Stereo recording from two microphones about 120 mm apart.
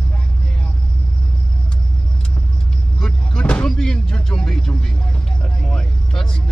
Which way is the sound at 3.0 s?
5° left (ahead or behind).